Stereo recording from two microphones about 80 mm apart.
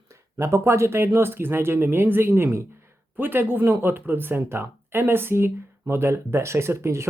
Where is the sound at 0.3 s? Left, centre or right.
Right.